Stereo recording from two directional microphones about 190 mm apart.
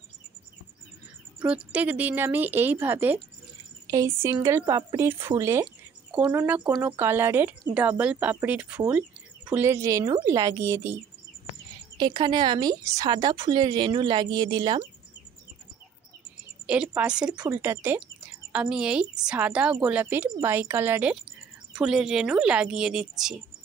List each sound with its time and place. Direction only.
1.4 s speech: 10° right (ahead or behind)
12.0 s speech: 25° right (ahead or behind)
16.6 s speech: 5° right (ahead or behind)